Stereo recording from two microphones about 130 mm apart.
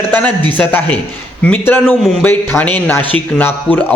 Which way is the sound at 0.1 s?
10° left (ahead or behind).